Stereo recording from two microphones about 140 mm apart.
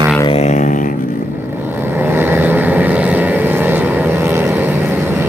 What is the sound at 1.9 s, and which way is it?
Vehicle, 15° right (ahead or behind).